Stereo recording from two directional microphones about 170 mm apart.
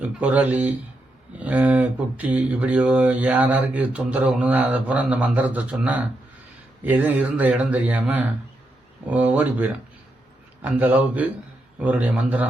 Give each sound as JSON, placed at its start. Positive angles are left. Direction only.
{"t": 0.0, "sound": "speech", "side_deg": -10}